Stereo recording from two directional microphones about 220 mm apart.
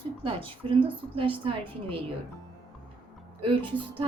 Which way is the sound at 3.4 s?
20° right (ahead or behind).